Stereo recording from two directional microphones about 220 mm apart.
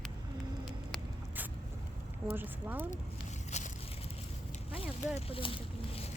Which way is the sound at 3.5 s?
30° left (ahead or behind).